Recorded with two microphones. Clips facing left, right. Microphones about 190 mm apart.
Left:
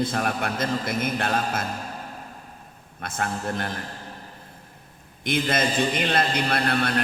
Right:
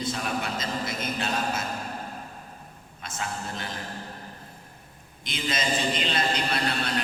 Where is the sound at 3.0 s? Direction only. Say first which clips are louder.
Left 5 dB; 55° left (ahead or behind).